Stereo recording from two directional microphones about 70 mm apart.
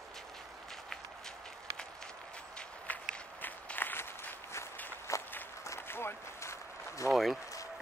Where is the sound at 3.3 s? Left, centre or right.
Left.